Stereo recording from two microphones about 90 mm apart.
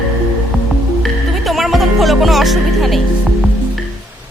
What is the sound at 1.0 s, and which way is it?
Music, centre (ahead or behind).